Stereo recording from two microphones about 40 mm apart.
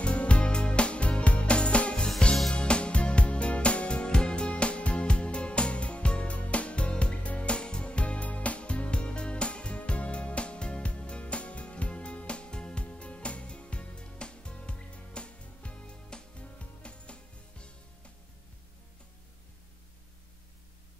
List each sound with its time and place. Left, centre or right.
0.0 s music: left